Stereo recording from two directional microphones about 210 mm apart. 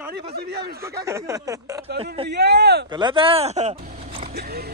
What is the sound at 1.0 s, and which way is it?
Speech, 15° right (ahead or behind).